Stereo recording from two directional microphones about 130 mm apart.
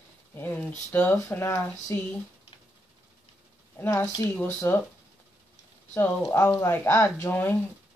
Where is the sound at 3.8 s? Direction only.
20° left (ahead or behind).